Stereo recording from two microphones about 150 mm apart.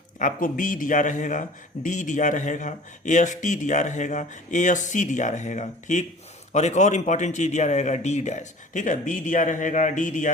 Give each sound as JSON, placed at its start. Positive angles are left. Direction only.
{"t": 0.2, "sound": "speech", "side_deg": 60}